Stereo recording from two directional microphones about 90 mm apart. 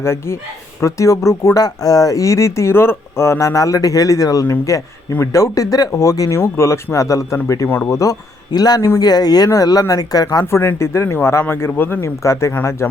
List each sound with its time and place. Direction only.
0.0 s speech: 30° left (ahead or behind)
8.5 s speech: 45° left (ahead or behind)
10.4 s speech: 25° left (ahead or behind)